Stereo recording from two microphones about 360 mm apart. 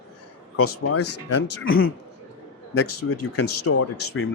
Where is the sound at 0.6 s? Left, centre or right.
Left.